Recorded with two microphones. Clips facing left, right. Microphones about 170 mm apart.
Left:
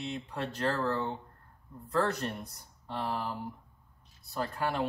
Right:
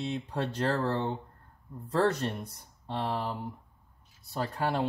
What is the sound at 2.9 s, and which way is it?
Speech, 25° right (ahead or behind).